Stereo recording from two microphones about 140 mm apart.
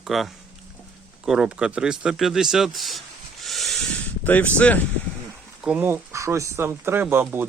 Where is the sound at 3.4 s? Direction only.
Centre (ahead or behind).